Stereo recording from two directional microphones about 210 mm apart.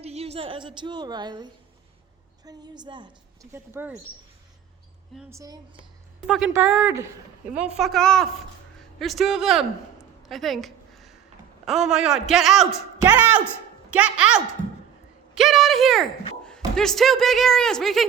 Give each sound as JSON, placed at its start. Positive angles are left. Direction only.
{"t": 0.0, "sound": "a woman's voice", "side_deg": -30}
{"t": 3.5, "sound": "a woman's voice", "side_deg": -10}
{"t": 5.3, "sound": "a woman's voice", "side_deg": -15}
{"t": 6.2, "sound": "a man's voice", "side_deg": 0}
{"t": 15.4, "sound": "a sound", "side_deg": 0}
{"t": 16.4, "sound": "speech", "side_deg": 5}